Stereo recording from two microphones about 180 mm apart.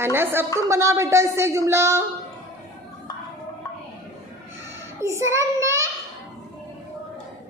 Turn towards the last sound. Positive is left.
turn(degrees=-15)  # may be behind; listen again after turning